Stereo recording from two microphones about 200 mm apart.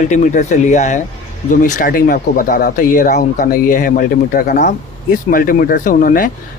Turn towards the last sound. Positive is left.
turn(degrees=45)  # may be behind; listen again after turning